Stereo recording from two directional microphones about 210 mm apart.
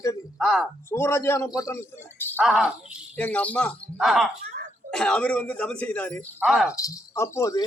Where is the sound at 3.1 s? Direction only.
5° left (ahead or behind).